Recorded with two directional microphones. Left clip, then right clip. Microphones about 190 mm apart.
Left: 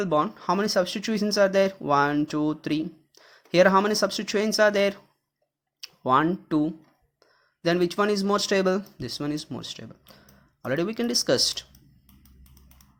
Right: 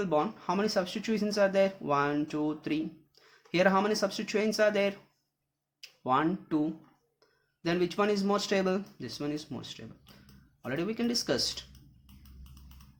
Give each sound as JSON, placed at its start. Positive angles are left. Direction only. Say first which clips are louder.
{"t": 0.0, "sound": "speech", "louder": "left 5 dB", "side_deg": 45}